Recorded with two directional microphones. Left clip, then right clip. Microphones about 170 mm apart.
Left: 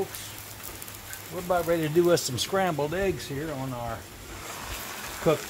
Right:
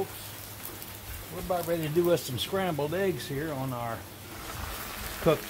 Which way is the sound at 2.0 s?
50° left (ahead or behind).